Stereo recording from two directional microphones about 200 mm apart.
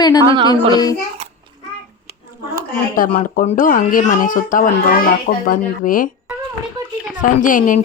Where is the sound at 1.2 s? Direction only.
30° right (ahead or behind).